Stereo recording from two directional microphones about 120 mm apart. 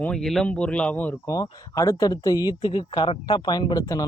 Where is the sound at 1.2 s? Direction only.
30° left (ahead or behind).